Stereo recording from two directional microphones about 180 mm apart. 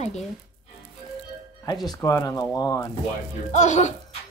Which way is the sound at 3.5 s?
40° left (ahead or behind).